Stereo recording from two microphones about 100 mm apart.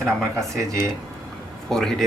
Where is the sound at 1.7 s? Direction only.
5° left (ahead or behind).